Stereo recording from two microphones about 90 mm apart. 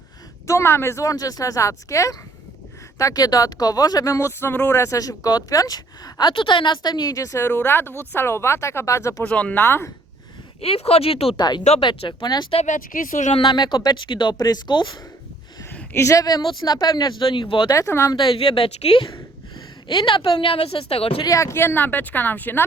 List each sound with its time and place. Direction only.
0.4 s a woman's voice: 30° left (ahead or behind)
4.8 s a woman's voice: 40° left (ahead or behind)
6.3 s a woman's voice: 65° left (ahead or behind); by 9.2 s 35° left (ahead or behind)
9.2 s speech: 15° left (ahead or behind)
10.6 s speech: 90° left
11.3 s a woman's voice: 55° left (ahead or behind)
13.3 s a woman's voice: 70° left (ahead or behind)
15.7 s a sound: 20° left (ahead or behind)
16.0 s a woman's voice: 40° left (ahead or behind)
16.4 s a woman's voice: 60° left (ahead or behind)
17.7 s a woman's voice: 35° left (ahead or behind)
18.1 s a woman's voice: 65° left (ahead or behind); by 21.2 s 90° left
21.2 s speech: 35° left (ahead or behind)